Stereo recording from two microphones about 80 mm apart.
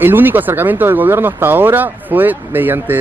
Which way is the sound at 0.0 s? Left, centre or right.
Right.